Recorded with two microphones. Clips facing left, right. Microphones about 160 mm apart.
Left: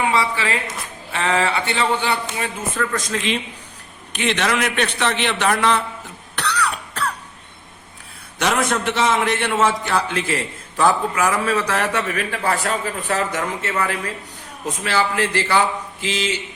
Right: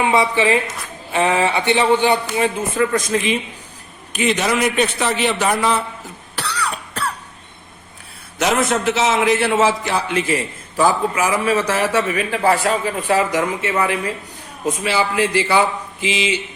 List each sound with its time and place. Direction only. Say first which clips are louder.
0.0 s a woman's voice: right 4 dB; 20° right (ahead or behind); by 5.8 s 5° right (ahead or behind)
6.3 s cough: left 2 dB; 5° right (ahead or behind)
8.4 s a man's voice: right 2 dB; 5° right (ahead or behind)